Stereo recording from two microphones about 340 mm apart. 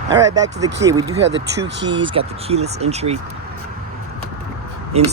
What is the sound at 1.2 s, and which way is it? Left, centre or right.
Speech, right.